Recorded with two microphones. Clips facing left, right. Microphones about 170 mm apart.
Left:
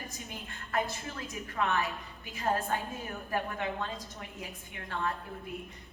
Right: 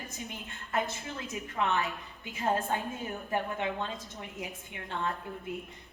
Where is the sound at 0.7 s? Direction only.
20° right (ahead or behind).